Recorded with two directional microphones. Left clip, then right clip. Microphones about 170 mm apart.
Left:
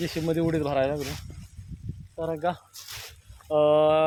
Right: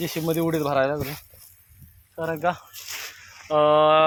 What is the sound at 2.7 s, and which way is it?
Snake, 40° right (ahead or behind).